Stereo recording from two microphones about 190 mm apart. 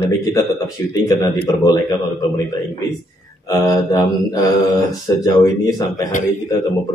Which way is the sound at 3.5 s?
20° left (ahead or behind).